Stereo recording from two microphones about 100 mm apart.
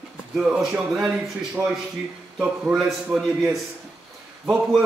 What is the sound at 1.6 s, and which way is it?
A man's voice, 20° right (ahead or behind).